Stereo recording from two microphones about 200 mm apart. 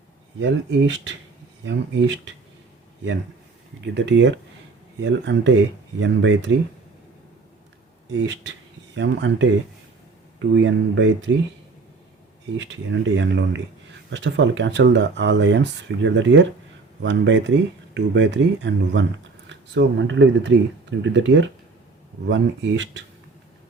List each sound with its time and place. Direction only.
0.3 s speech: 65° right (ahead or behind)
3.9 s speech: 60° right (ahead or behind)
8.1 s speech: 60° right (ahead or behind)
12.5 s speech: 60° right (ahead or behind)